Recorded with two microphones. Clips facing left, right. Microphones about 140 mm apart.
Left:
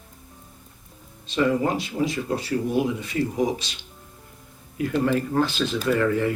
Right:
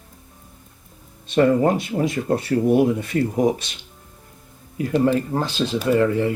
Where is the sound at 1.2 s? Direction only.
50° right (ahead or behind).